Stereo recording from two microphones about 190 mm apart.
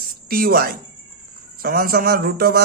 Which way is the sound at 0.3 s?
50° right (ahead or behind).